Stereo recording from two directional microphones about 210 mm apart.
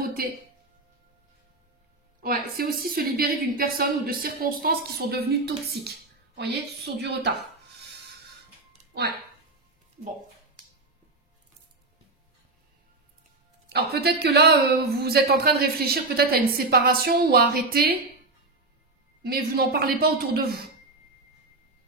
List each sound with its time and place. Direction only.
0.0 s music: 45° right (ahead or behind)
2.2 s a woman's voice: 45° right (ahead or behind)
13.7 s a woman's voice: 50° right (ahead or behind)
19.2 s a woman's voice: 45° right (ahead or behind)